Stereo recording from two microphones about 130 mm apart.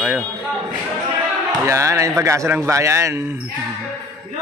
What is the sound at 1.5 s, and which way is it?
A man's voice, 25° right (ahead or behind).